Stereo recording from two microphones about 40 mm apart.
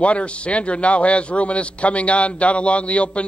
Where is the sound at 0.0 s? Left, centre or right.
Left.